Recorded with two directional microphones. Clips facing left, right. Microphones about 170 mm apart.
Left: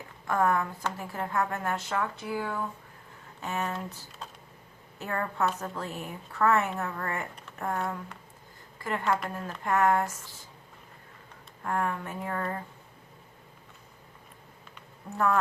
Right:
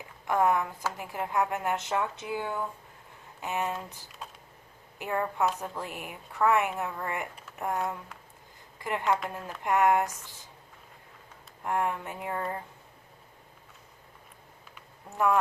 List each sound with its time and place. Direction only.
0.3 s speech: 15° right (ahead or behind)
11.6 s speech: 15° right (ahead or behind)
14.8 s a sound: 15° right (ahead or behind)